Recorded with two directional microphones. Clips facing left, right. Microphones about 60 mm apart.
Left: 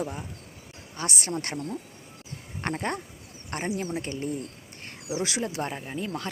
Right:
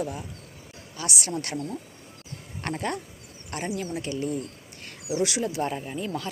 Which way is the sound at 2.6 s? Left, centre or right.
Left.